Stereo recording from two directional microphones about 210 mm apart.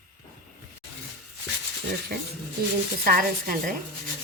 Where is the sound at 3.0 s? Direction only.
40° right (ahead or behind).